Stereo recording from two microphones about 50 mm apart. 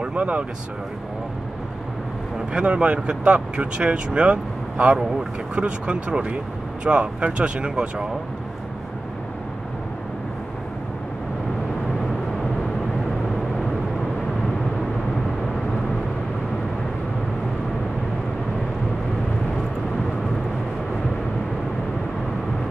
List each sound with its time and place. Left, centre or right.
0.0 s speech: right
2.5 s speech: right